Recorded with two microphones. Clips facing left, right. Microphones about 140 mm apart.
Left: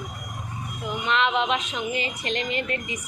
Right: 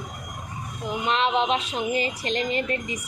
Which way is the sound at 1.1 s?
35° right (ahead or behind).